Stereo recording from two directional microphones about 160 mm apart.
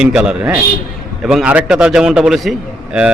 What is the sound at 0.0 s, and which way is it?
A man's voice, 5° right (ahead or behind).